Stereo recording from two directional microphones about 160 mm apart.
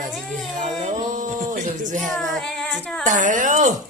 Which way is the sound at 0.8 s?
50° right (ahead or behind).